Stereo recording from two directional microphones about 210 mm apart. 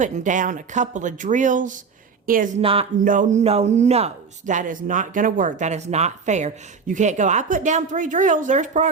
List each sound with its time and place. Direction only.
0.0 s a man's voice: 35° right (ahead or behind)
2.6 s speech: 25° right (ahead or behind)
3.0 s a man's voice: 40° right (ahead or behind)